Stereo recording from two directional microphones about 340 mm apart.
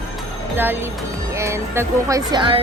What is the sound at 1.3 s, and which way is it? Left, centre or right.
Speech, centre.